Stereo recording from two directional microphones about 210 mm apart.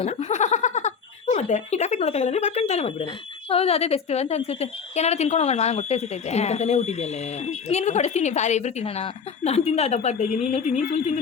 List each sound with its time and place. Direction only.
0.0 s a woman's voice: 30° left (ahead or behind)